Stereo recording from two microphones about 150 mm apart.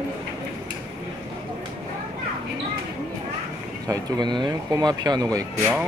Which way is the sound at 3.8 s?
25° right (ahead or behind).